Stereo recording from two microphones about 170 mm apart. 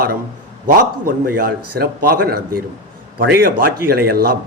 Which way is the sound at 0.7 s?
55° right (ahead or behind).